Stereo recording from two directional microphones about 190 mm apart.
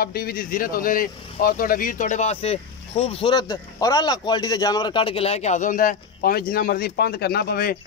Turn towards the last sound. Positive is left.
turn(degrees=55)  # may be behind; listen again after turning